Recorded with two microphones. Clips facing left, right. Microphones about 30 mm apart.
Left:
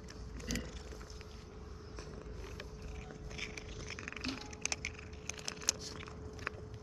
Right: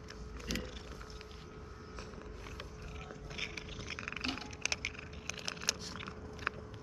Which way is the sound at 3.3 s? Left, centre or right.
Right.